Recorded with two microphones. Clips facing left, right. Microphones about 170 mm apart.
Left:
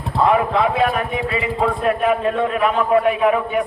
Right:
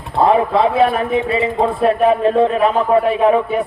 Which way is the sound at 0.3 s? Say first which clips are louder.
Right 3 dB; 30° right (ahead or behind).